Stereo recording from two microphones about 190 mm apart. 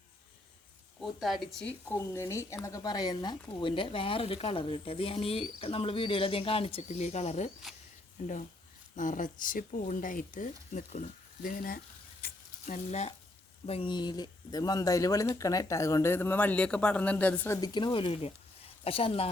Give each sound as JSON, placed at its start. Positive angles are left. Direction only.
{"t": 1.0, "sound": "speech", "side_deg": 0}
{"t": 9.0, "sound": "speech", "side_deg": 45}
{"t": 12.2, "sound": "frying", "side_deg": 40}
{"t": 13.7, "sound": "speech", "side_deg": 30}
{"t": 17.6, "sound": "speech", "side_deg": 20}